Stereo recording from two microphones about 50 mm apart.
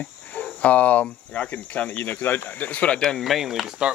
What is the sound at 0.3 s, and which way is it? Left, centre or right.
Speech, left.